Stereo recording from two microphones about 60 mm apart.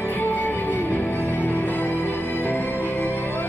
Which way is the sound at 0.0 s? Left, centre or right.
Left.